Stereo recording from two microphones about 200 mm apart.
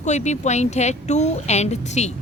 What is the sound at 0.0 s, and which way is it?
A woman's voice, 35° left (ahead or behind).